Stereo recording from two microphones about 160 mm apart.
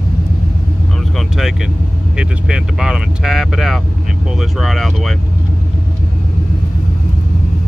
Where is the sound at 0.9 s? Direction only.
Centre (ahead or behind).